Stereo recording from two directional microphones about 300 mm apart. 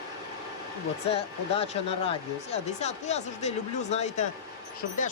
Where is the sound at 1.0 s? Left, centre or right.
Centre.